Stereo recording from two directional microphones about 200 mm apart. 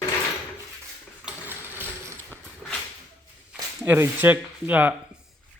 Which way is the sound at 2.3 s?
10° right (ahead or behind).